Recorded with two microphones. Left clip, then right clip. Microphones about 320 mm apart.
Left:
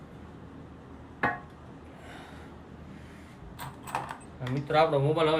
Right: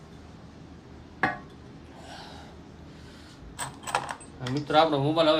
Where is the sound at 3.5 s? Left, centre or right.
Right.